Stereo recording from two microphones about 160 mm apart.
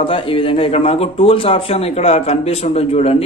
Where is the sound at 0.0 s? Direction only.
35° left (ahead or behind).